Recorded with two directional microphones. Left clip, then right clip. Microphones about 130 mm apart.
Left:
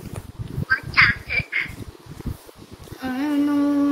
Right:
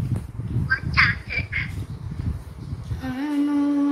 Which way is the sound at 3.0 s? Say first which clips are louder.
Left 2 dB; 20° left (ahead or behind).